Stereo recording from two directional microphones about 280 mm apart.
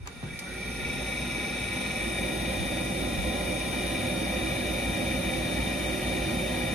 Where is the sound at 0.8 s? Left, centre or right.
Centre.